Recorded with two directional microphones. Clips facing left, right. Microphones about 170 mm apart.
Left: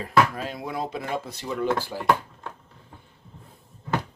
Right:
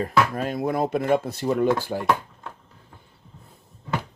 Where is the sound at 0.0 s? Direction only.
50° right (ahead or behind).